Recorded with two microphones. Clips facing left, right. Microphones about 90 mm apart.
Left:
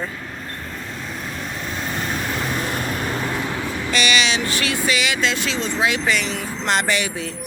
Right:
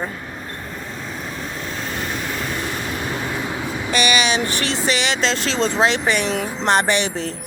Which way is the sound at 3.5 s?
15° right (ahead or behind).